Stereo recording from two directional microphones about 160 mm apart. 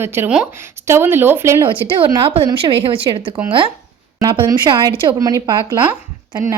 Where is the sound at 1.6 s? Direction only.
35° right (ahead or behind).